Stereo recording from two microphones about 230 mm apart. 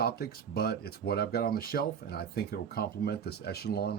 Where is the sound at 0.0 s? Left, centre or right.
Left.